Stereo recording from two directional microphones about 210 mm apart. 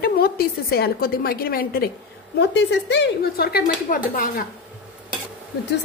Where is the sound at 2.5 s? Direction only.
55° left (ahead or behind).